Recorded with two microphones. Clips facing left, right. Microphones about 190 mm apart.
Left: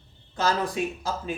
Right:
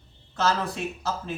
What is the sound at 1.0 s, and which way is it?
Speech, 15° left (ahead or behind).